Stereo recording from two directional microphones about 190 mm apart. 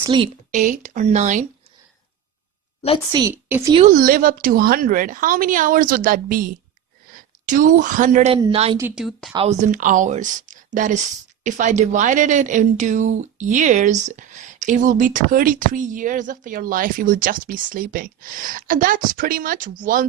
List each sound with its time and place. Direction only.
0.0 s speech: 25° right (ahead or behind)
0.5 s speech: 40° right (ahead or behind)
3.1 s a woman's voice: 20° right (ahead or behind)
3.3 s speech: 10° right (ahead or behind)
3.8 s a woman's voice: 50° right (ahead or behind); by 8.8 s 30° right (ahead or behind)
8.8 s speech: centre (ahead or behind)
9.3 s speech: 35° right (ahead or behind)